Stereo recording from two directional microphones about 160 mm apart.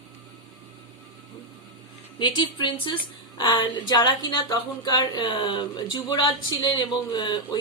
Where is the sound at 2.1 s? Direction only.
30° left (ahead or behind).